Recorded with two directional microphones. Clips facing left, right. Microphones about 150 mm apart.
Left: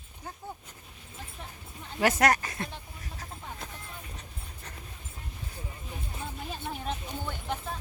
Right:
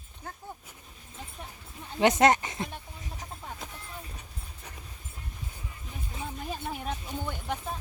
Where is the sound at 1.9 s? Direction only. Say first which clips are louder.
Right 3 dB; 20° right (ahead or behind).